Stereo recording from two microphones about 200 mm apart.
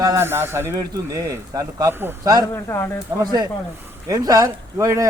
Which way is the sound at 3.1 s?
20° right (ahead or behind).